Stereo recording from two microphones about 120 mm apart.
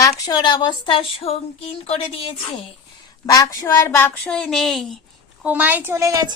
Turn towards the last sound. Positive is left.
turn(degrees=-30)  # may be behind; listen again after turning